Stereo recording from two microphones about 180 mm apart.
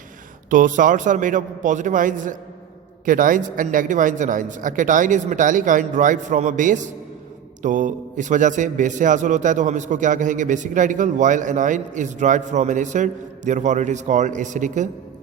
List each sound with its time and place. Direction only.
0.5 s a man's voice: 45° right (ahead or behind)